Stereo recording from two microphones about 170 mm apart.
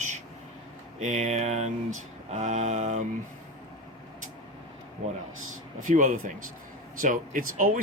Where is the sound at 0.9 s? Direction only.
40° right (ahead or behind).